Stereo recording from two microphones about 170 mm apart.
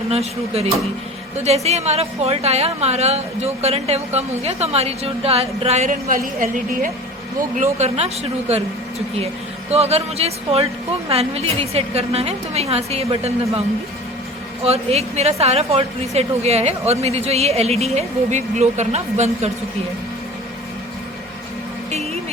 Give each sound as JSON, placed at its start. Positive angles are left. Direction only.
{"t": 0.1, "sound": "speech", "side_deg": -35}
{"t": 7.6, "sound": "speech", "side_deg": -40}
{"t": 9.7, "sound": "speech", "side_deg": -35}
{"t": 14.6, "sound": "speech", "side_deg": -35}